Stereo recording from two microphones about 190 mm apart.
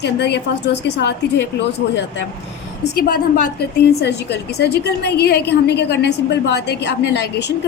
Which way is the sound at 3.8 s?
60° left (ahead or behind).